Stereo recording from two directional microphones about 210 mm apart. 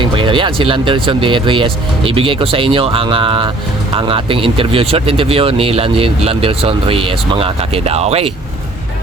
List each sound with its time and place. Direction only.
0.0 s speech: 25° right (ahead or behind)